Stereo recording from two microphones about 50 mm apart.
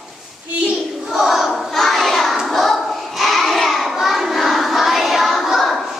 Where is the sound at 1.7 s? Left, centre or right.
Centre.